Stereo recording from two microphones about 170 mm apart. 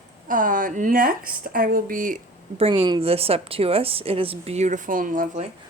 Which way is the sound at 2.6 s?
35° right (ahead or behind).